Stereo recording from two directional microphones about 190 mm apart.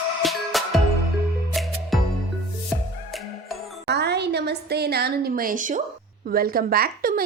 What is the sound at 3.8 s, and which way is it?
A woman's voice, 60° right (ahead or behind).